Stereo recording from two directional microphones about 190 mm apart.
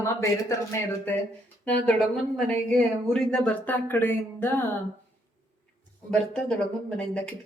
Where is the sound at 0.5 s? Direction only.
20° left (ahead or behind).